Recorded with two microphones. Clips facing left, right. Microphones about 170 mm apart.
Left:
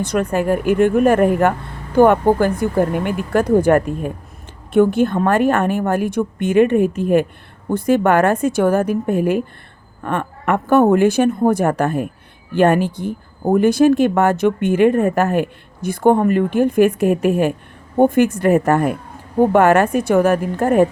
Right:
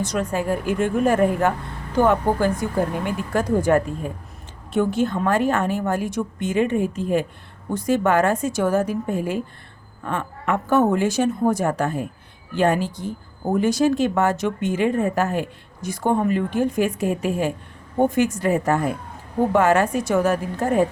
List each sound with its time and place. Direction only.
0.0 s speech: 60° left (ahead or behind)